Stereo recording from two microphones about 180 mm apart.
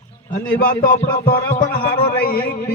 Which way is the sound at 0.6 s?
55° left (ahead or behind).